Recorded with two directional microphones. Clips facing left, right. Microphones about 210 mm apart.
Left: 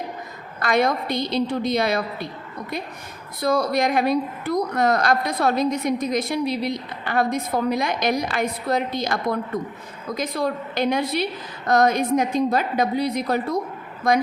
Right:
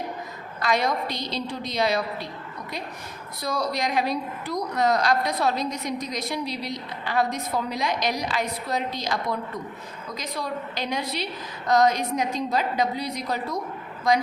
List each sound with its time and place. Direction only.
0.6 s a woman's voice: 55° left (ahead or behind)
3.4 s a woman's voice: 55° left (ahead or behind)
10.2 s a woman's voice: 55° left (ahead or behind)